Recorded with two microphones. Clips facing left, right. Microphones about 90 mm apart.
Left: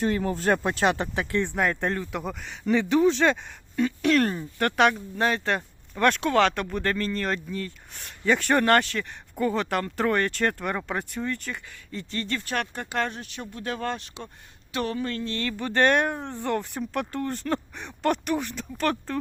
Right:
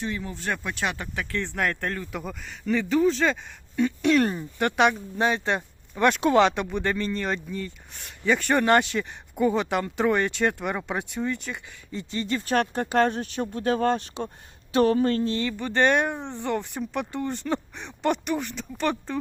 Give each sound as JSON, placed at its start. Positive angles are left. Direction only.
{"t": 0.0, "sound": "speech", "side_deg": 50}
{"t": 1.5, "sound": "speech", "side_deg": 10}
{"t": 12.3, "sound": "speech", "side_deg": -25}
{"t": 15.4, "sound": "speech", "side_deg": -5}